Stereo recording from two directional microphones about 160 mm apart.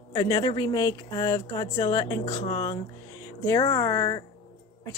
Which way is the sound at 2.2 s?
40° left (ahead or behind).